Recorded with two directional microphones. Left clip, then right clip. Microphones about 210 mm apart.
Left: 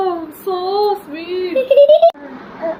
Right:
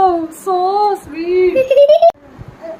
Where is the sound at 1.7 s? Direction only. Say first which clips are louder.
Left 1 dB; 30° right (ahead or behind).